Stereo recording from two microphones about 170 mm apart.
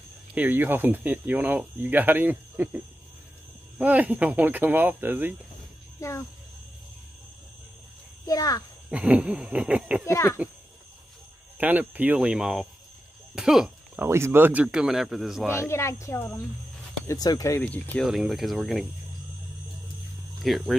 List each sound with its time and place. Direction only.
0.3 s speech: 10° right (ahead or behind)
5.9 s speech: 15° left (ahead or behind)
8.3 s speech: 20° left (ahead or behind)
8.9 s speech: 5° right (ahead or behind)
10.0 s speech: 15° left (ahead or behind)
11.5 s speech: 10° right (ahead or behind)
13.3 s a sound: 5° right (ahead or behind)
14.0 s speech: 15° right (ahead or behind)
15.5 s speech: 15° left (ahead or behind)
17.6 s speech: 10° left (ahead or behind)
20.3 s speech: centre (ahead or behind)